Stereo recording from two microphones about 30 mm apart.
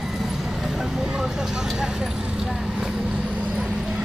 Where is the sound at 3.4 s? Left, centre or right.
Right.